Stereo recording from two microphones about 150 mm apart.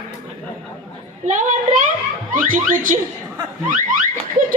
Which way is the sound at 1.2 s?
55° right (ahead or behind).